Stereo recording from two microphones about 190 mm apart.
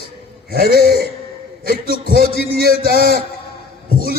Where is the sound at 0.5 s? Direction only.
55° right (ahead or behind).